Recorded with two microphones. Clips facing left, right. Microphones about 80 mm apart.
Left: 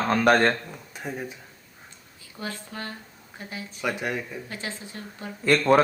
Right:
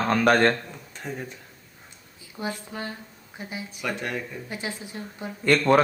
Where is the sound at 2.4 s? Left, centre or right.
Centre.